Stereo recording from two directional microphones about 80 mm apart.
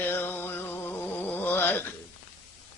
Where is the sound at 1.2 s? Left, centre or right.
Left.